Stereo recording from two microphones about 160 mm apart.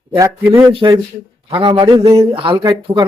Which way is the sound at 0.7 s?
30° right (ahead or behind).